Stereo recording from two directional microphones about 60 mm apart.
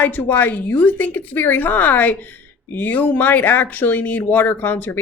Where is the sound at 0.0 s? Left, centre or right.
Left.